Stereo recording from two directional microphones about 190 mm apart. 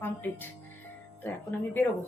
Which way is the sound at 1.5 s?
10° left (ahead or behind).